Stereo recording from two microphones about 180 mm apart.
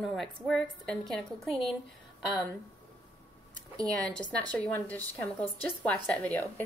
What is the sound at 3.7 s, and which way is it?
Speech, 20° right (ahead or behind).